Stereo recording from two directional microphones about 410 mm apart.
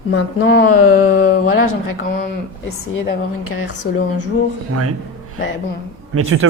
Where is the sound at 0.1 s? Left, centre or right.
Left.